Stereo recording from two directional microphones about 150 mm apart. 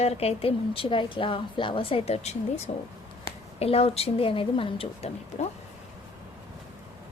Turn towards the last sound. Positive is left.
turn(degrees=40)  # may be behind; listen again after turning